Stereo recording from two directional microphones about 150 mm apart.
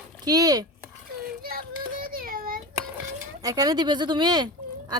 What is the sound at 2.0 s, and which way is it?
Child singing, 75° right (ahead or behind).